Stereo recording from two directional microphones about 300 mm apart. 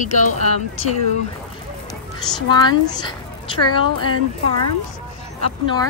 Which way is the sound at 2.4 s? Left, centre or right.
Centre.